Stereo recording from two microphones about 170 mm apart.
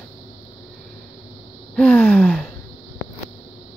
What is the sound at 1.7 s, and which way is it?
Gasp, 5° left (ahead or behind).